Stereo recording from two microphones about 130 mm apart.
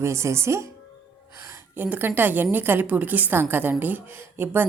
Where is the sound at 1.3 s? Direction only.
20° right (ahead or behind).